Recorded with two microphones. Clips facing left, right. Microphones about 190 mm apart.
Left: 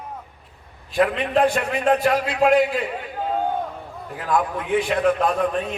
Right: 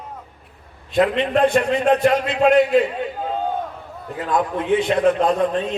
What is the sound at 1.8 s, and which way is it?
Speech, 25° right (ahead or behind).